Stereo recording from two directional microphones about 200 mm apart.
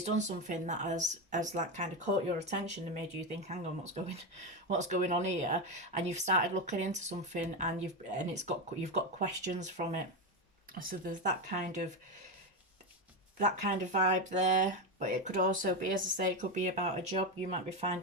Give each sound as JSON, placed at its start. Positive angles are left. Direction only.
{"t": 0.0, "sound": "speech", "side_deg": -35}
{"t": 13.4, "sound": "speech", "side_deg": -35}